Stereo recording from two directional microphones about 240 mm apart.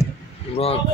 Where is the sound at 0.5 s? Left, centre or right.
Left.